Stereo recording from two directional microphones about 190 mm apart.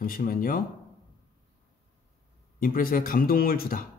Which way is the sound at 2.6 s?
50° left (ahead or behind).